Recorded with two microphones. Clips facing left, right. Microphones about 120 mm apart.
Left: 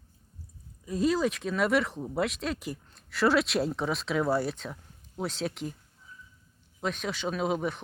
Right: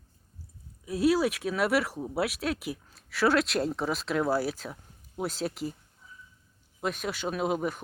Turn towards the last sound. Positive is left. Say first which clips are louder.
# even
turn(degrees=-5)  # may be behind; listen again after turning